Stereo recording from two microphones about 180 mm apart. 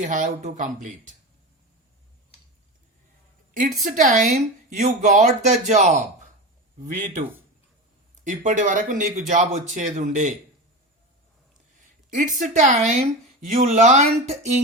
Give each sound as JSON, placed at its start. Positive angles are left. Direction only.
{"t": 0.0, "sound": "speech", "side_deg": -45}
{"t": 3.8, "sound": "speech", "side_deg": -45}
{"t": 8.2, "sound": "speech", "side_deg": -45}
{"t": 11.8, "sound": "speech", "side_deg": -45}